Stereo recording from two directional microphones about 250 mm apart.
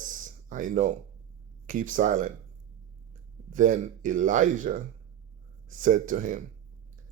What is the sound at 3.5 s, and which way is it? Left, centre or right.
Speech, right.